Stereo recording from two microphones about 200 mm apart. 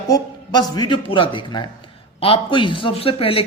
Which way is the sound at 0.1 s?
20° left (ahead or behind).